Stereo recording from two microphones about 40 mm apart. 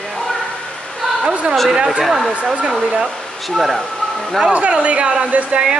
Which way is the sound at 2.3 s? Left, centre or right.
Right.